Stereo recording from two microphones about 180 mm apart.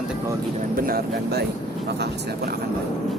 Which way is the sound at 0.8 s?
60° right (ahead or behind).